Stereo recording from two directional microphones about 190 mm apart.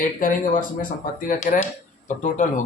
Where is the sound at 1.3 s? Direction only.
40° left (ahead or behind).